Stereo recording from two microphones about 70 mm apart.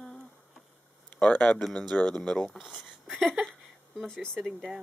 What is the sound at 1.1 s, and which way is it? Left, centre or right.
Speech, left.